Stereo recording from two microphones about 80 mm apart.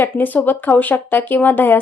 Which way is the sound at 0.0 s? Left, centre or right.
Left.